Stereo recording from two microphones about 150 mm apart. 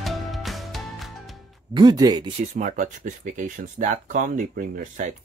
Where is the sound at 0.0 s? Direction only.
Centre (ahead or behind).